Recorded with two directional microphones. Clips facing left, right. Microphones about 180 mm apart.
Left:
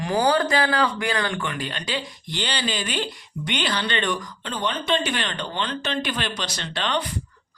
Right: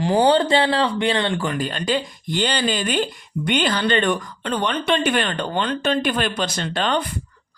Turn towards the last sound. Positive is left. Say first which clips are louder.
# right 4 dB
turn(degrees=-50)  # may be behind; listen again after turning